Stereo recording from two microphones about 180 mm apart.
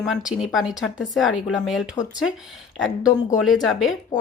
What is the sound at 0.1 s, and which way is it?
Speech, centre (ahead or behind).